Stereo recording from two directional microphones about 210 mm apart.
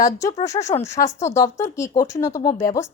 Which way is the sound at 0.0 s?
15° left (ahead or behind).